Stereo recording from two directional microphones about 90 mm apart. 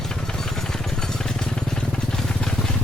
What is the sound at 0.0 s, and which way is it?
Vehicle, 5° left (ahead or behind).